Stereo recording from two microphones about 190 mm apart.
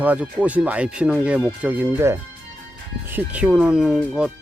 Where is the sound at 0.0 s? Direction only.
5° right (ahead or behind).